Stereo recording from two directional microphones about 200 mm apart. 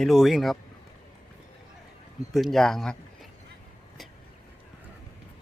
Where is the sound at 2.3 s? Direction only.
Centre (ahead or behind).